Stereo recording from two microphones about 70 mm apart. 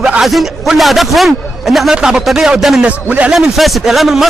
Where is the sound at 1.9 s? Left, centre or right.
Centre.